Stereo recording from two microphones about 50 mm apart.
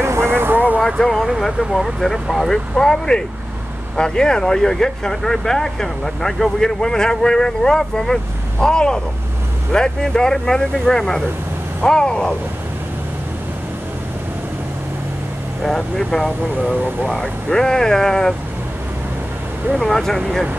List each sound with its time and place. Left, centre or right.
0.0 s vehicle: right
0.9 s speech: centre
15.6 s speech: centre
19.8 s speech: centre